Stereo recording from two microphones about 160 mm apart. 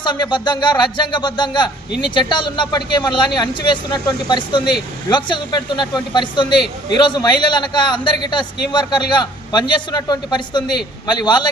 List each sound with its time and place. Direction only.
0.0 s speech: 30° left (ahead or behind)